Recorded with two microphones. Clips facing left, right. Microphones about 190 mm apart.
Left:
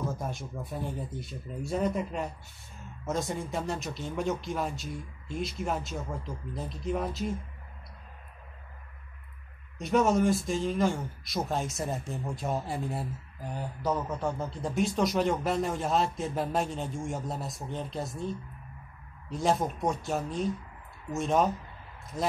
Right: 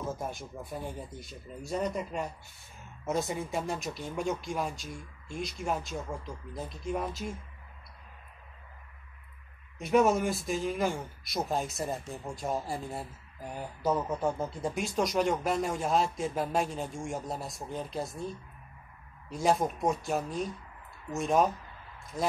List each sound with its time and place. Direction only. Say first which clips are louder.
0.2 s speech: left 1 dB; centre (ahead or behind)
9.8 s speech: even; 5° right (ahead or behind)
19.3 s speech: even; centre (ahead or behind)